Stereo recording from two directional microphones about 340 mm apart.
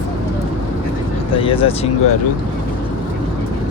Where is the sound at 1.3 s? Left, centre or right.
Centre.